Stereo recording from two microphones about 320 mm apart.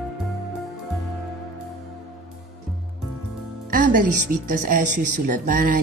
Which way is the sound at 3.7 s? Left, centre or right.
Right.